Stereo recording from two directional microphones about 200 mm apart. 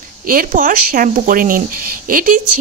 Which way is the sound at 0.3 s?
45° right (ahead or behind).